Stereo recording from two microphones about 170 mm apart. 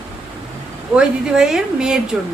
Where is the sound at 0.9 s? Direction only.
5° right (ahead or behind).